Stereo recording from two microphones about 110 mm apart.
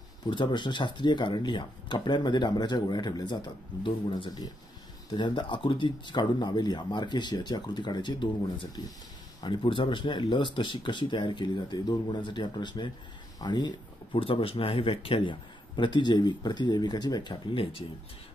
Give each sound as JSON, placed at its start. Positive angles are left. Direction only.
{"t": 0.3, "sound": "speech", "side_deg": 45}
{"t": 9.4, "sound": "speech", "side_deg": 50}
{"t": 14.2, "sound": "speech", "side_deg": 55}